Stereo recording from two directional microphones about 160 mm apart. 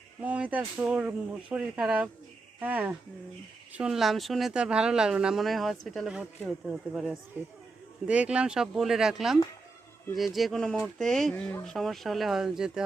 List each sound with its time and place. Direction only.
0.2 s speech: 10° right (ahead or behind)